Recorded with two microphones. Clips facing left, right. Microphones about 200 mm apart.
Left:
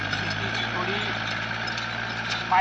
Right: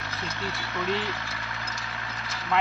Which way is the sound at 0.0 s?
50° left (ahead or behind).